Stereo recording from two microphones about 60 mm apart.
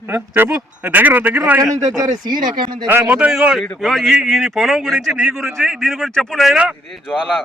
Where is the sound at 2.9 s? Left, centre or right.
Right.